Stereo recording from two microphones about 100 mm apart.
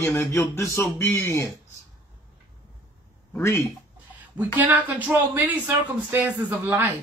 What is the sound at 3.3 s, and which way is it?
Speech, 25° left (ahead or behind).